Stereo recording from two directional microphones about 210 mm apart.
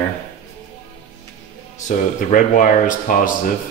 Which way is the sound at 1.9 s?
40° left (ahead or behind).